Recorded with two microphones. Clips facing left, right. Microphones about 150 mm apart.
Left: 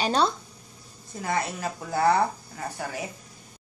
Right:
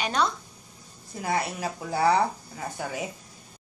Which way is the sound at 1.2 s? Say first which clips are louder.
Even; 10° right (ahead or behind).